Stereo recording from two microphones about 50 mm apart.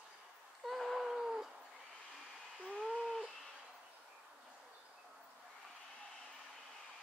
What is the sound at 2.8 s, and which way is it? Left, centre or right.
Bird, centre.